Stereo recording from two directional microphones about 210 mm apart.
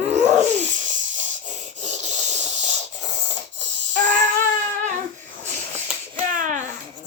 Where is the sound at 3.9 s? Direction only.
35° right (ahead or behind).